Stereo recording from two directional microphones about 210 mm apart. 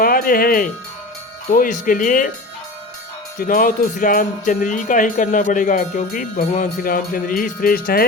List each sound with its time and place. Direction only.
0.0 s speech: 45° left (ahead or behind)
1.5 s jingle bell: 40° left (ahead or behind)
3.3 s jingle bell: 40° left (ahead or behind)